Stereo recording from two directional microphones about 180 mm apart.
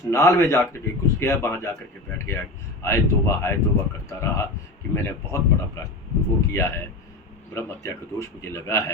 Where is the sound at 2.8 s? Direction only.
15° left (ahead or behind).